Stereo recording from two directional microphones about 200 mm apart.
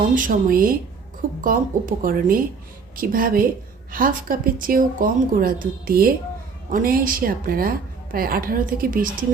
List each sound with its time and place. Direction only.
0.1 s speech: 45° right (ahead or behind)